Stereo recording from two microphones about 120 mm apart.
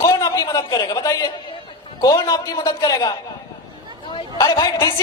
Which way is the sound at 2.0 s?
30° left (ahead or behind).